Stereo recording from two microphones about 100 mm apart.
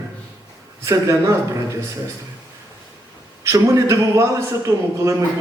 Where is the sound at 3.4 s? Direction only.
30° right (ahead or behind).